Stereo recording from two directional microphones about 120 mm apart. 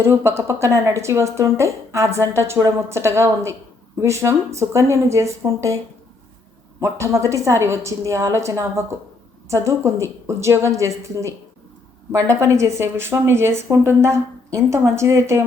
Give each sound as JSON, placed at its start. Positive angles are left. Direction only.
{"t": 0.0, "sound": "speech", "side_deg": -20}